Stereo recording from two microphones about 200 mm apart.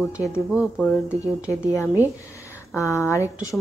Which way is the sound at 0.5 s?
Centre (ahead or behind).